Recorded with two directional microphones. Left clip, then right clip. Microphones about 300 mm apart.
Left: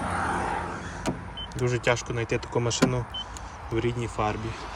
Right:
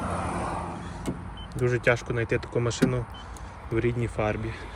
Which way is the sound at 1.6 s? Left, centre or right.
Centre.